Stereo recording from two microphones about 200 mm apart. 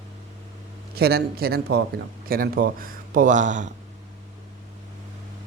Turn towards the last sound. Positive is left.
turn(degrees=-40)  # may be behind; listen again after turning